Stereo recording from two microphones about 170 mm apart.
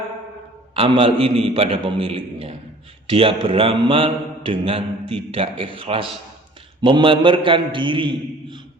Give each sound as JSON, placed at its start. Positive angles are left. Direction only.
{"t": 0.7, "sound": "mantra", "side_deg": -30}
{"t": 6.8, "sound": "a man's voice", "side_deg": -30}